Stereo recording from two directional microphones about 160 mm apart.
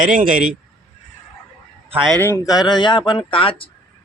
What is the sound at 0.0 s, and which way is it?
Speech, 55° right (ahead or behind).